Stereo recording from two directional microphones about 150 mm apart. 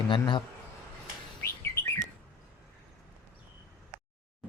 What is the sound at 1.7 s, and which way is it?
Bird, 20° left (ahead or behind).